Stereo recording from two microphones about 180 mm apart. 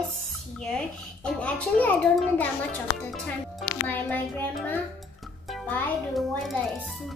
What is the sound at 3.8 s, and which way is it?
Speech, 10° left (ahead or behind).